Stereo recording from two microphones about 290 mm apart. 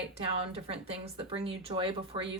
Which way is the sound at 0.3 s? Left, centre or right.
Centre.